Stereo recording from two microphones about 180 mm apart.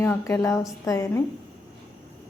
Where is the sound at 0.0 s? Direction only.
15° left (ahead or behind).